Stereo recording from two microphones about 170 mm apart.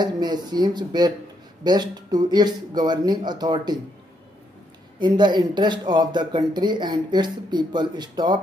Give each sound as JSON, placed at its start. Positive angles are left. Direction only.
{"t": 0.0, "sound": "speech", "side_deg": -25}
{"t": 4.9, "sound": "speech", "side_deg": -25}